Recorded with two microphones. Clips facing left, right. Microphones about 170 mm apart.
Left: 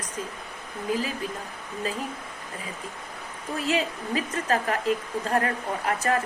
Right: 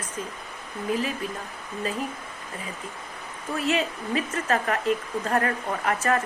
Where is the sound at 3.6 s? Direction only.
35° left (ahead or behind).